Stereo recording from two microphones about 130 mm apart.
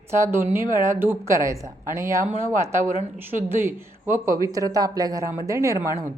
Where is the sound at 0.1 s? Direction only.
20° right (ahead or behind).